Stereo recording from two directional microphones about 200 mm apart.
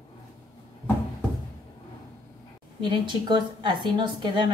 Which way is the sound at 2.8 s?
25° right (ahead or behind).